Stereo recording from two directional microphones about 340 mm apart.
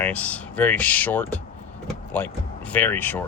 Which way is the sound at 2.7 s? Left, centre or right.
Centre.